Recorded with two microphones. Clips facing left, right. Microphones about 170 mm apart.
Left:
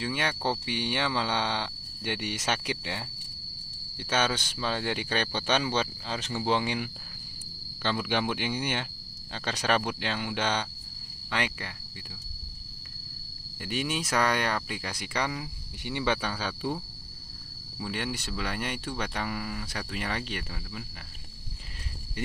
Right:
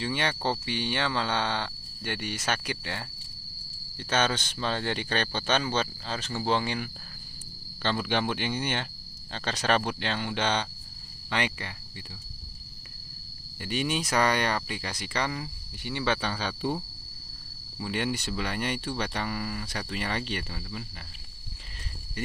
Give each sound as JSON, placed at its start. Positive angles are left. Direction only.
{"t": 0.0, "sound": "speech", "side_deg": 5}
{"t": 4.1, "sound": "speech", "side_deg": 10}
{"t": 13.6, "sound": "speech", "side_deg": 0}
{"t": 17.7, "sound": "speech", "side_deg": 0}